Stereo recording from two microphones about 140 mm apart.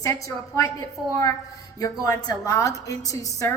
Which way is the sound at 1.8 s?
25° left (ahead or behind).